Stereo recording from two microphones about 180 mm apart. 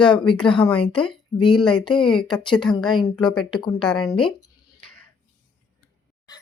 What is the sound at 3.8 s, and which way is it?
Speech, 5° left (ahead or behind).